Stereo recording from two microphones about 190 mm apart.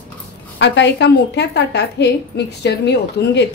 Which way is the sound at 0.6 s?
65° left (ahead or behind).